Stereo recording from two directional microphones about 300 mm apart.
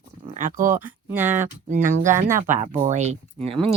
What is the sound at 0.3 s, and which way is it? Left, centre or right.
Speech, right.